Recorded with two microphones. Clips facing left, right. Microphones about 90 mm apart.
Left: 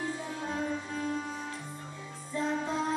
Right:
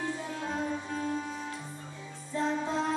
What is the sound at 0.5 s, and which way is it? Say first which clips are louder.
Music: even; 35° right (ahead or behind).